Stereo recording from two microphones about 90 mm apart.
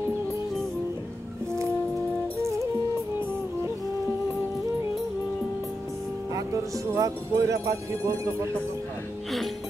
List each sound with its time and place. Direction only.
6.3 s speech: 40° right (ahead or behind)